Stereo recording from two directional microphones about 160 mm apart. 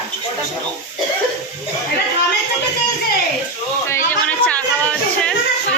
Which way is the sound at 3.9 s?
15° left (ahead or behind).